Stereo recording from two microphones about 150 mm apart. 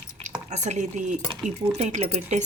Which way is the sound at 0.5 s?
50° right (ahead or behind).